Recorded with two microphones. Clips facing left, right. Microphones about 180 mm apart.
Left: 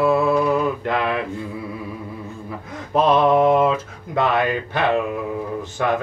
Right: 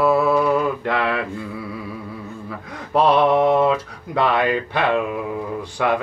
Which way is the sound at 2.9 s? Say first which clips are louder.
Even; 20° left (ahead or behind).